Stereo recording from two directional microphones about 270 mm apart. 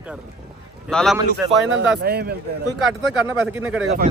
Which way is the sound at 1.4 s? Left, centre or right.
Centre.